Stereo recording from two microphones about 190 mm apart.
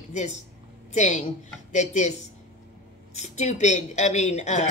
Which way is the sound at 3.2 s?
35° left (ahead or behind).